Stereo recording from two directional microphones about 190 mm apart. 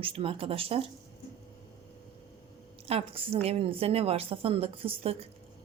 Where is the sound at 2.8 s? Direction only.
30° right (ahead or behind).